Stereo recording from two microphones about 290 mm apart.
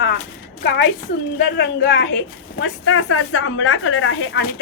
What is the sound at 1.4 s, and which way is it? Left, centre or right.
A woman's voice, left.